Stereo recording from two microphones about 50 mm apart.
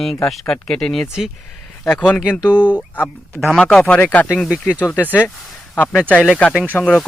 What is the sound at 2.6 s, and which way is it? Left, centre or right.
Speech, left.